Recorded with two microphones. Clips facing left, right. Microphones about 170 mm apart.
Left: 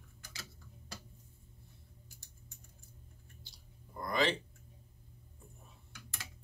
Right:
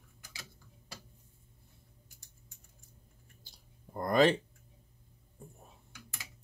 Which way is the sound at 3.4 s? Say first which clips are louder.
Left 2 dB; 50° right (ahead or behind).